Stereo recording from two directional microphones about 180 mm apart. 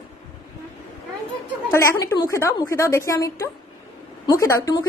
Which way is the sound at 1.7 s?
15° left (ahead or behind).